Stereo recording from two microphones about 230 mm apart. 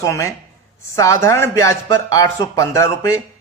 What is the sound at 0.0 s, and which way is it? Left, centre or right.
A man's voice, centre.